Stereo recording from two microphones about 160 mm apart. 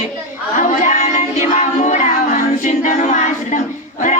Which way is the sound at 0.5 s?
50° left (ahead or behind).